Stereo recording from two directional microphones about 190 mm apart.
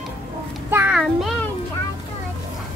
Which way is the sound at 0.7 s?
5° right (ahead or behind).